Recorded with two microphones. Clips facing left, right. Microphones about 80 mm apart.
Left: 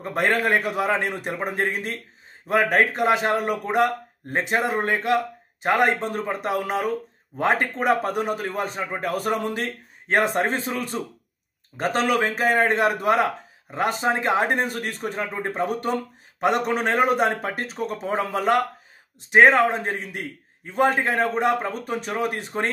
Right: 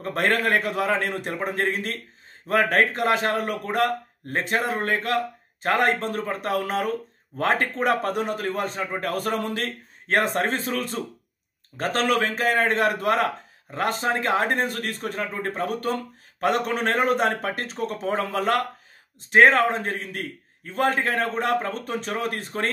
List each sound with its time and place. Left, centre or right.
0.0 s a man's voice: centre